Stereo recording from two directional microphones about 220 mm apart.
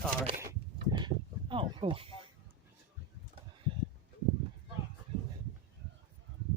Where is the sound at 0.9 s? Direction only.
20° right (ahead or behind).